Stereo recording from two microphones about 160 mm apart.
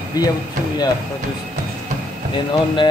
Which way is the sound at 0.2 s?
25° left (ahead or behind).